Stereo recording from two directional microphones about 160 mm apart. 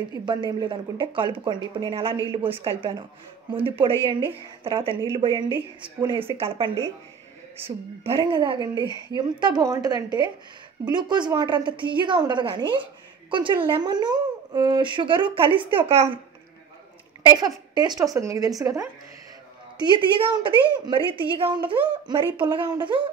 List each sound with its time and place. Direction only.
0.1 s a woman's voice: 30° right (ahead or behind)
4.6 s a woman's voice: 35° right (ahead or behind)
8.1 s a woman's voice: 30° right (ahead or behind)
17.3 s a woman's voice: 25° right (ahead or behind)